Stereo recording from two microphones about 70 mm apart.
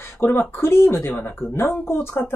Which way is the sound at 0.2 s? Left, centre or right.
Left.